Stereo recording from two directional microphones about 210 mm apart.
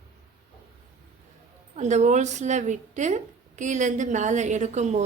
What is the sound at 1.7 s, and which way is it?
A woman's voice, 35° right (ahead or behind).